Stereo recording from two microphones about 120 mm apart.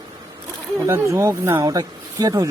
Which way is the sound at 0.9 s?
25° right (ahead or behind).